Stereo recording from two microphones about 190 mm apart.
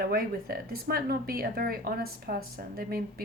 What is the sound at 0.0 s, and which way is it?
Speech, 50° right (ahead or behind).